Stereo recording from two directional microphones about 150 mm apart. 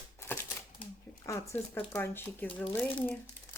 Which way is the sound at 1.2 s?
20° left (ahead or behind).